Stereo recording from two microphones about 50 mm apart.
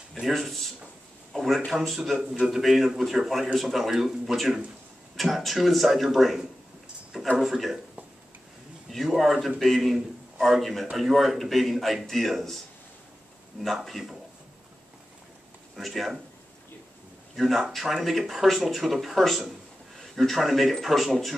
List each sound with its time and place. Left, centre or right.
0.1 s speech: centre
8.9 s a man's voice: centre
13.8 s speech: centre
15.7 s speech: centre
17.4 s speech: centre